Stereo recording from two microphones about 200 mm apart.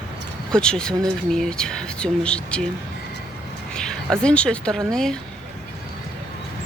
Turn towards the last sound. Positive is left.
turn(degrees=5)  # may be behind; listen again after turning